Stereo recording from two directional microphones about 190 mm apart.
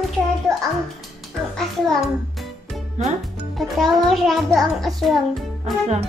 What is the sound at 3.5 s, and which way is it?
Music, centre (ahead or behind).